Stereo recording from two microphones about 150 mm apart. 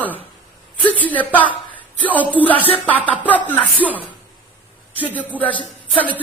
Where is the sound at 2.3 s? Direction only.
10° left (ahead or behind).